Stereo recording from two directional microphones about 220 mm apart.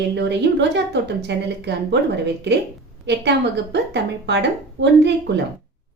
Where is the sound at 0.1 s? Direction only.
50° right (ahead or behind).